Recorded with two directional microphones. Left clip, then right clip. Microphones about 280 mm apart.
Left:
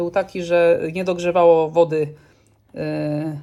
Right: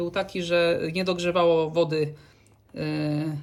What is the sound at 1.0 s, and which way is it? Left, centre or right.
A man's voice, centre.